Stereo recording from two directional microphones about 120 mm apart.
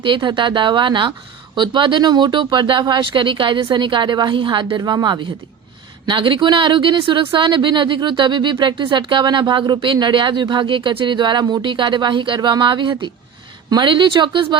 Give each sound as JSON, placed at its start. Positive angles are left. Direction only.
{"t": 0.0, "sound": "speech", "side_deg": -40}